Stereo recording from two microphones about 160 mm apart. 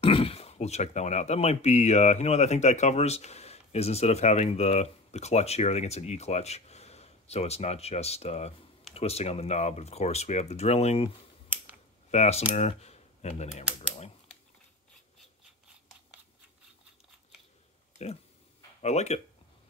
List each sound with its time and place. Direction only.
0.0 s speech: 35° left (ahead or behind)
18.8 s speech: 45° left (ahead or behind)